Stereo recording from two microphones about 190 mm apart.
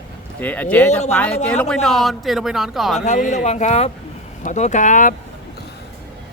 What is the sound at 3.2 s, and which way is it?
Speech, 40° left (ahead or behind).